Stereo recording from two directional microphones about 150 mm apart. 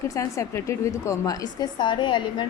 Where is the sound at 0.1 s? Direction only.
20° left (ahead or behind).